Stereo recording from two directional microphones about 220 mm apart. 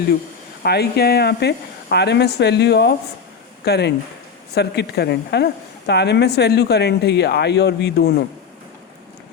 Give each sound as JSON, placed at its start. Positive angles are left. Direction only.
{"t": 0.6, "sound": "a woman's voice", "side_deg": 45}